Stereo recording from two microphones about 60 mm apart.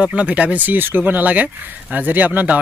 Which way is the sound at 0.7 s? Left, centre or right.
Right.